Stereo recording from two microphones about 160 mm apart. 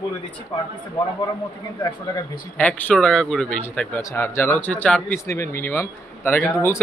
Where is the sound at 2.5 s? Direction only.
10° left (ahead or behind).